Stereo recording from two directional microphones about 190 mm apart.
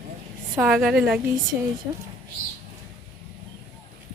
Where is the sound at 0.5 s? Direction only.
5° right (ahead or behind).